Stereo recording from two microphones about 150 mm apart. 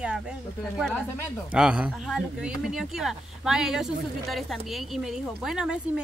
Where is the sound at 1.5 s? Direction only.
5° right (ahead or behind).